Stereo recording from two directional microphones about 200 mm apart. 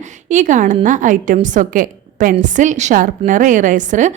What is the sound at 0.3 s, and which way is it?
A woman's voice, 40° right (ahead or behind).